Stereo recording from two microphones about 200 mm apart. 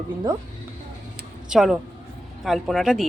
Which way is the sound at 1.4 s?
5° right (ahead or behind).